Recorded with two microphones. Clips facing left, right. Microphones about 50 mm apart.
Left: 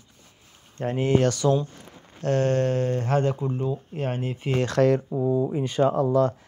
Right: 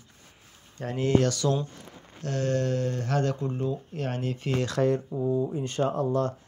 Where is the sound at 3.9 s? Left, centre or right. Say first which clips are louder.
Left 2 dB; left.